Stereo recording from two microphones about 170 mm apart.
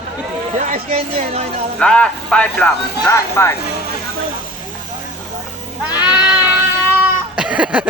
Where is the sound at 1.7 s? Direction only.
5° left (ahead or behind).